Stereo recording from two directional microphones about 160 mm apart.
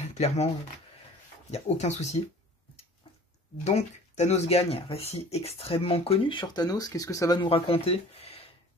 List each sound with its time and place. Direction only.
0.0 s speech: 40° left (ahead or behind)
1.5 s speech: 45° left (ahead or behind)
3.6 s speech: 45° left (ahead or behind)